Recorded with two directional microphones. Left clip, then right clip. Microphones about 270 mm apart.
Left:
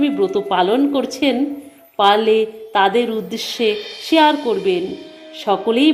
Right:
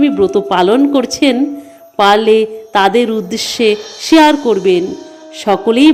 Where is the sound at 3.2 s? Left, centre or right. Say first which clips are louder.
Right 6 dB; right.